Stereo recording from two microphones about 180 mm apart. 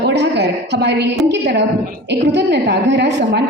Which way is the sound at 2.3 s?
65° right (ahead or behind).